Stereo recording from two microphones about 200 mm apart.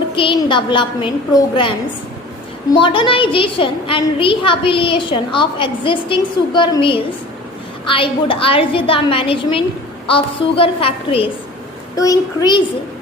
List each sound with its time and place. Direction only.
0.2 s a woman's voice: 25° left (ahead or behind)
2.8 s a woman's voice: 25° left (ahead or behind)